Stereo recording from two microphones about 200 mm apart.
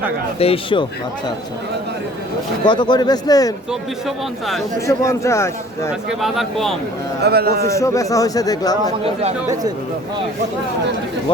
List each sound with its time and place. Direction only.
0.3 s speech: 30° left (ahead or behind)
2.6 s speech: 20° left (ahead or behind)
3.7 s a man's voice: centre (ahead or behind)
4.9 s speech: 15° left (ahead or behind)
5.9 s a man's voice: centre (ahead or behind)
7.2 s a man's voice: 55° right (ahead or behind)
7.7 s speech: 15° left (ahead or behind)